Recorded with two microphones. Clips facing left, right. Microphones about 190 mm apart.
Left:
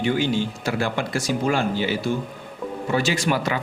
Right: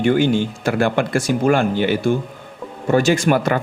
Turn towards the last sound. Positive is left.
turn(degrees=-50)  # may be behind; listen again after turning